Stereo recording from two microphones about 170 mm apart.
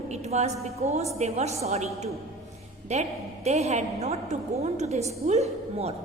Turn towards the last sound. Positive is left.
turn(degrees=-40)  # may be behind; listen again after turning